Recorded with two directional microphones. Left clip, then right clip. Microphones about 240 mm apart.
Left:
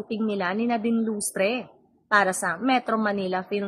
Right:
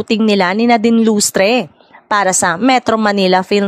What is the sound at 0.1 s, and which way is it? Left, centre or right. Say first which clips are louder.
Speech: right 14 dB; right.